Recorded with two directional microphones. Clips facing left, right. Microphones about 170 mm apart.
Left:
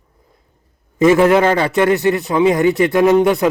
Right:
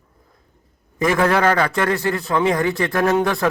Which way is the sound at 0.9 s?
25° left (ahead or behind).